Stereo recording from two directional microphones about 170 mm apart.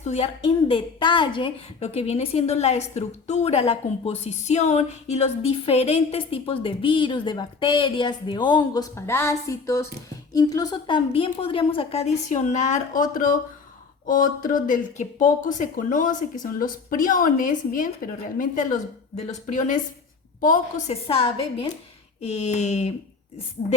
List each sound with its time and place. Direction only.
0.0 s a woman's voice: 40° left (ahead or behind)